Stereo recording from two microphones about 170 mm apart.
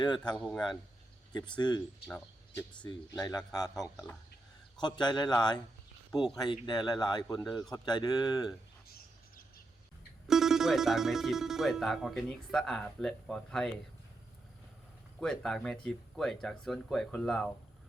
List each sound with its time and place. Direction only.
0.3 s speech: 5° left (ahead or behind)
1.3 s speech: 25° left (ahead or behind)
2.8 s speech: 25° left (ahead or behind)
3.9 s speech: 5° left (ahead or behind)
4.8 s speech: 25° left (ahead or behind)
10.2 s speech: centre (ahead or behind)
15.2 s speech: 5° left (ahead or behind)